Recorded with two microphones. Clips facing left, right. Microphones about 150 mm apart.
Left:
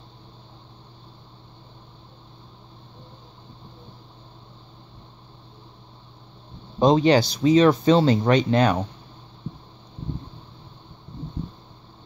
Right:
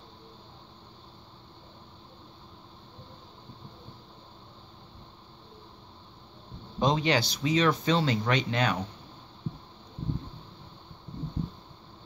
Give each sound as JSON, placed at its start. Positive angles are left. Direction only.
{"t": 6.8, "sound": "speech", "side_deg": 35}